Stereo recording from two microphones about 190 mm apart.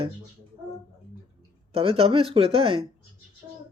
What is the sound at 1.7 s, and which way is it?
Speech, 30° right (ahead or behind).